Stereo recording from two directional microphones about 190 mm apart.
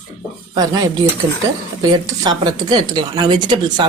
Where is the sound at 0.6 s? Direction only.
20° right (ahead or behind).